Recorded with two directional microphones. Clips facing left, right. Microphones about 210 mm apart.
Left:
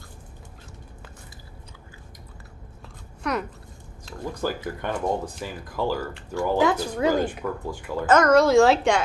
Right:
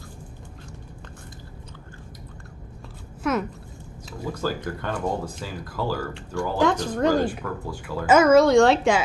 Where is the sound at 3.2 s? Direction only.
Centre (ahead or behind).